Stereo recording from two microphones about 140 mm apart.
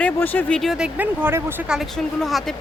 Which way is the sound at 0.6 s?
5° right (ahead or behind).